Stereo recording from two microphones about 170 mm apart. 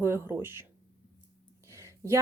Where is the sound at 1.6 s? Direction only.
15° right (ahead or behind).